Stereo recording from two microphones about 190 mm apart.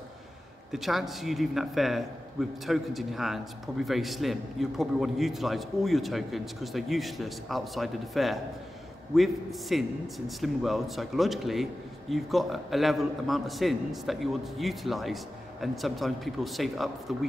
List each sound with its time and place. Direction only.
0.7 s a man's voice: centre (ahead or behind)